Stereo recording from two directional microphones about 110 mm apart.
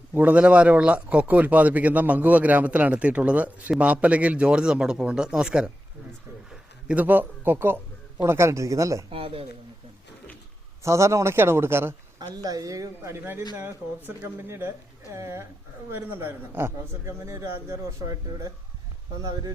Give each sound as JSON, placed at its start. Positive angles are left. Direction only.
{"t": 0.1, "sound": "a man's voice", "side_deg": -15}
{"t": 9.1, "sound": "speech", "side_deg": -55}
{"t": 10.8, "sound": "a man's voice", "side_deg": -25}
{"t": 12.3, "sound": "a man's voice", "side_deg": -35}